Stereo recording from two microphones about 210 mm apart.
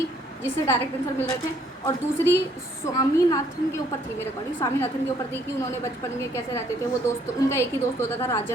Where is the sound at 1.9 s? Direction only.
10° left (ahead or behind).